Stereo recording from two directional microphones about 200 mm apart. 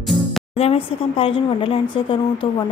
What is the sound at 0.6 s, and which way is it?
Speech, 30° left (ahead or behind).